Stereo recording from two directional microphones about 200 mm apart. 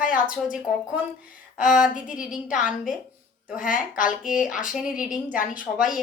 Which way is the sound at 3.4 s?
45° left (ahead or behind).